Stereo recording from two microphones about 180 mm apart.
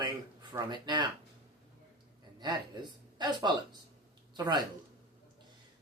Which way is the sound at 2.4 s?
25° right (ahead or behind).